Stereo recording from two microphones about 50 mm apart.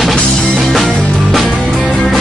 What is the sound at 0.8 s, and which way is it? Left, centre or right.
Music, centre.